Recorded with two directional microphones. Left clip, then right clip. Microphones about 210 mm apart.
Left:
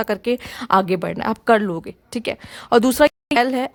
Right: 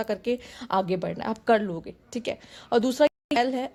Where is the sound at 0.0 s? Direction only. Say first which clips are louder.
Left 7 dB; 25° left (ahead or behind).